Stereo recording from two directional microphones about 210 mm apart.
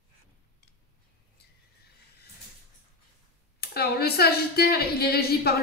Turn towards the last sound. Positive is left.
turn(degrees=45)  # may be behind; listen again after turning